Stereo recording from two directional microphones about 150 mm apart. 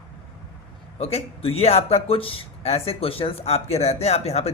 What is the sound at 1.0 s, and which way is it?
Speech, 45° left (ahead or behind).